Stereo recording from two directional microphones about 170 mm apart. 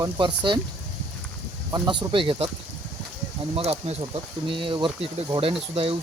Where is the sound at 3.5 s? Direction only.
35° right (ahead or behind).